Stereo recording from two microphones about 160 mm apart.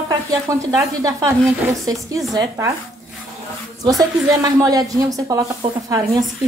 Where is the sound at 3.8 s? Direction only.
20° right (ahead or behind).